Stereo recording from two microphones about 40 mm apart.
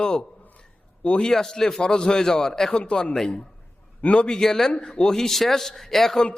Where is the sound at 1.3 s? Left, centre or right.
Centre.